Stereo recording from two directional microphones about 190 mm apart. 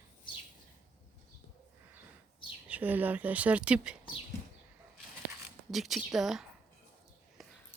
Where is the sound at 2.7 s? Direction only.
10° right (ahead or behind).